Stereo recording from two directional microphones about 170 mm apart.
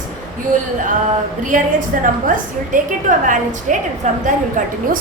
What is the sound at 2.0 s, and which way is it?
A woman's voice, 50° right (ahead or behind).